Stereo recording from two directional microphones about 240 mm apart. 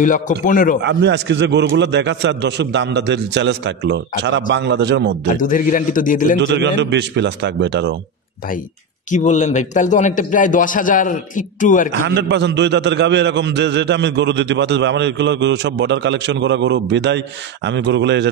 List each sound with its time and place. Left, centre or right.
0.0 s a man's voice: left
0.8 s a man's voice: right
5.3 s a man's voice: left
6.4 s a man's voice: right
9.1 s a man's voice: left
12.1 s a man's voice: right